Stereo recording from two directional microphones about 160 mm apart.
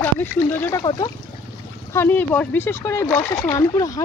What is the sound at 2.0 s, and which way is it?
Speech, 10° left (ahead or behind).